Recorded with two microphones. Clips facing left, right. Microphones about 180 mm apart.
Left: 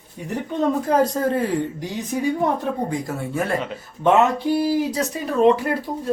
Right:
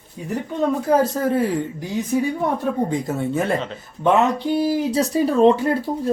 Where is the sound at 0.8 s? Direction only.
10° right (ahead or behind).